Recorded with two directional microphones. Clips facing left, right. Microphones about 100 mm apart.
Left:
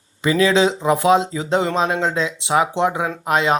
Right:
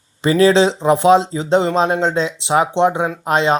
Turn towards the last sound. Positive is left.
turn(degrees=-30)  # may be behind; listen again after turning